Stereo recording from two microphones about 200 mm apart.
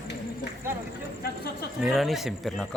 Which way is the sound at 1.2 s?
50° left (ahead or behind).